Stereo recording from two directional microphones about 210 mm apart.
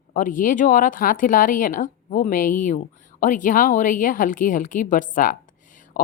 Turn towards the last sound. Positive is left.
turn(degrees=45)  # may be behind; listen again after turning